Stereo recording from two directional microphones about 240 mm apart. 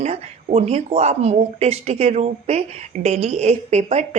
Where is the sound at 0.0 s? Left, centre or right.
Right.